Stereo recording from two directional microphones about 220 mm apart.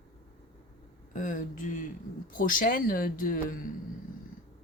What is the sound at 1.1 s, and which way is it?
Speech, 35° left (ahead or behind).